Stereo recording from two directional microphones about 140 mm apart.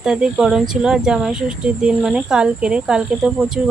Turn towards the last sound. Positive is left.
turn(degrees=-5)  # may be behind; listen again after turning